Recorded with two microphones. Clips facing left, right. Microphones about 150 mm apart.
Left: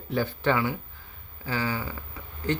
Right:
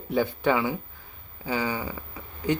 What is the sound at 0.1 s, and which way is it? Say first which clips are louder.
Speech: right 2 dB; 15° right (ahead or behind).